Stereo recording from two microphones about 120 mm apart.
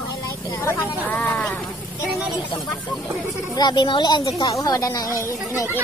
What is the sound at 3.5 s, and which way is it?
A woman's voice, 35° left (ahead or behind).